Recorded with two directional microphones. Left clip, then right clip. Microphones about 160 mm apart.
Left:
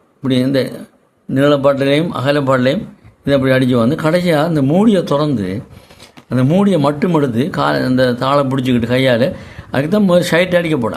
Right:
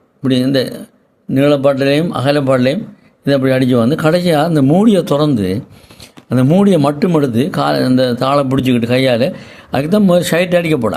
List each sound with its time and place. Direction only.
0.2 s speech: 15° right (ahead or behind)